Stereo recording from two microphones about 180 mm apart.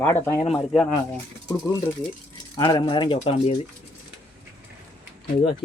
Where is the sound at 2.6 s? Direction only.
25° left (ahead or behind).